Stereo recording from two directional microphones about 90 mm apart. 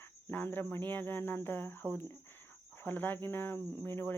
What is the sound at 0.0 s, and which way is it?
Cricket, 25° left (ahead or behind).